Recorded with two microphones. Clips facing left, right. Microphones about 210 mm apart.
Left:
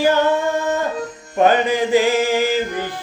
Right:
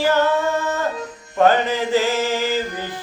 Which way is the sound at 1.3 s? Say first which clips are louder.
Left 1 dB; 15° left (ahead or behind).